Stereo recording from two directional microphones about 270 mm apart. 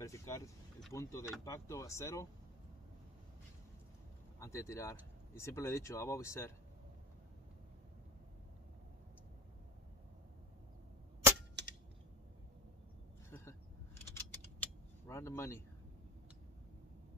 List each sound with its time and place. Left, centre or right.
0.0 s vehicle: centre
0.9 s speech: centre
4.4 s speech: centre
11.6 s a sound: right
13.3 s a sound: centre
14.6 s vehicle: centre